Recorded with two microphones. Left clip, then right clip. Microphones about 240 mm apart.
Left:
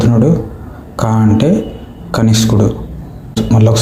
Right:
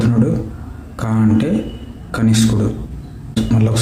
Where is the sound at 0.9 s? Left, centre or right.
Centre.